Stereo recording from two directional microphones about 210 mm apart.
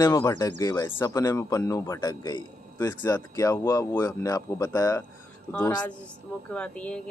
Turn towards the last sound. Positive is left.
turn(degrees=5)  # may be behind; listen again after turning